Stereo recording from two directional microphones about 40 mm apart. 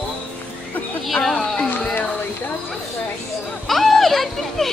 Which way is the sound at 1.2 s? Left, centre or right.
Centre.